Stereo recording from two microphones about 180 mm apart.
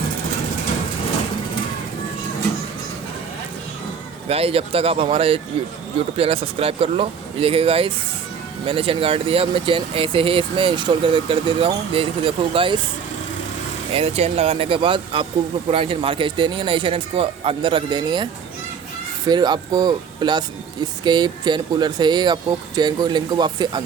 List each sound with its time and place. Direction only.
4.3 s speech: 30° right (ahead or behind)
13.9 s speech: 35° right (ahead or behind)
19.3 s speech: 25° right (ahead or behind)